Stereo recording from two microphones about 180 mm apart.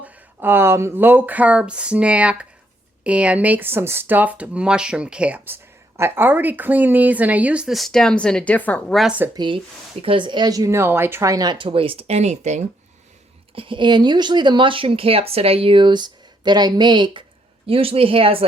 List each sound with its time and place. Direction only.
0.0 s speech: 10° right (ahead or behind)
9.3 s speech: 25° right (ahead or behind)
13.6 s speech: 30° right (ahead or behind)